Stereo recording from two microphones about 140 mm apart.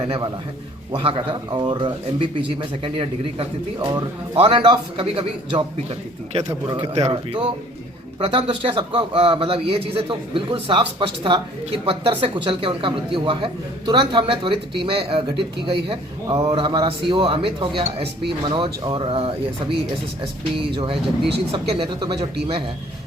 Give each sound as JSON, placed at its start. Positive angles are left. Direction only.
{"t": 0.9, "sound": "a man's voice", "side_deg": -35}